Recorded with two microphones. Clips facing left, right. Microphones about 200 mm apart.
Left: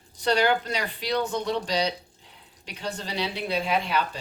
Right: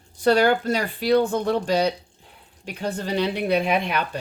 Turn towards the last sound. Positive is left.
turn(degrees=-60)  # may be behind; listen again after turning